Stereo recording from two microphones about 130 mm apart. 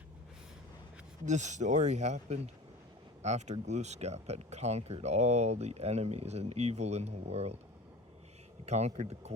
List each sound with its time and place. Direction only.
1.2 s speech: 65° right (ahead or behind)
8.6 s speech: 60° right (ahead or behind)